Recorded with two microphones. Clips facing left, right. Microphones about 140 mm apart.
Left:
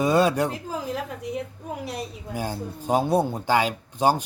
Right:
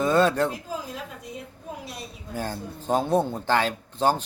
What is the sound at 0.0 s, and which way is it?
Speech, 10° left (ahead or behind).